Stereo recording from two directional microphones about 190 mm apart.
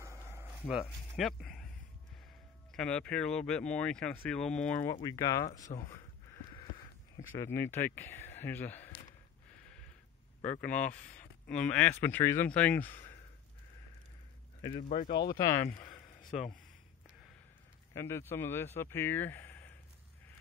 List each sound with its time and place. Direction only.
0.0 s a sound: 15° right (ahead or behind)
0.5 s a sound: centre (ahead or behind)
1.1 s speech: centre (ahead or behind)
2.7 s speech: 5° left (ahead or behind)
5.0 s speech: 20° left (ahead or behind)
10.4 s speech: 10° left (ahead or behind)
11.1 s a sound: 5° left (ahead or behind)
12.0 s speech: 10° left (ahead or behind)
14.8 s speech: 40° left (ahead or behind)
15.2 s speech: 20° left (ahead or behind)
17.9 s speech: 15° left (ahead or behind)